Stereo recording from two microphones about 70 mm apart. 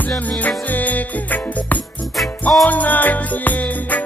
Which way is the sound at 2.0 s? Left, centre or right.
Centre.